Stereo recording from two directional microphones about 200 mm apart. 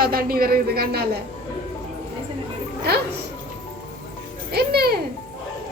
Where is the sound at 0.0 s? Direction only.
45° right (ahead or behind).